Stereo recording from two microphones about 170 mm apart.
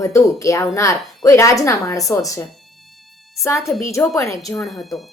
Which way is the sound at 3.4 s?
15° left (ahead or behind).